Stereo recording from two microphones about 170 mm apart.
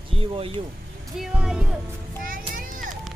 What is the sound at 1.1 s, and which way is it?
Music, centre (ahead or behind).